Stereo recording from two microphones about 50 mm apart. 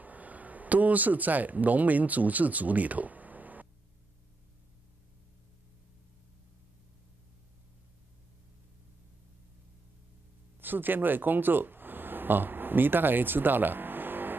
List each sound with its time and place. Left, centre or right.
0.0 s speech: right
10.6 s speech: right